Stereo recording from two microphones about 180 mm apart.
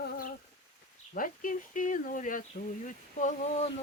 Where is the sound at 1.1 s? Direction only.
50° left (ahead or behind).